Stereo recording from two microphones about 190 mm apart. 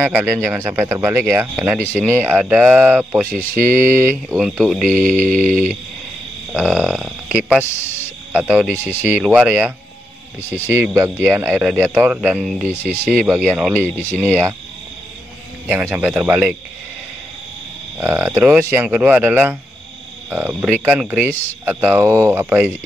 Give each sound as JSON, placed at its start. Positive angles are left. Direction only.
{"t": 0.0, "sound": "speech", "side_deg": -10}
{"t": 8.7, "sound": "speech", "side_deg": 10}
{"t": 9.1, "sound": "speech", "side_deg": -5}
{"t": 12.6, "sound": "speech", "side_deg": 10}
{"t": 13.5, "sound": "speech", "side_deg": -5}
{"t": 13.7, "sound": "speech", "side_deg": 10}
{"t": 15.7, "sound": "speech", "side_deg": -10}
{"t": 17.9, "sound": "speech", "side_deg": -10}